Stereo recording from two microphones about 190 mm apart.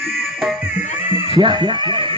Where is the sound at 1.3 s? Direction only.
25° right (ahead or behind).